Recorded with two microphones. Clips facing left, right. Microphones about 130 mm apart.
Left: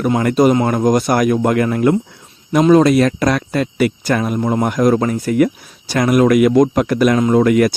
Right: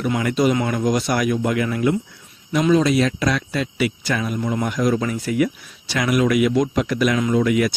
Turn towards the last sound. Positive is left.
turn(degrees=50)  # may be behind; listen again after turning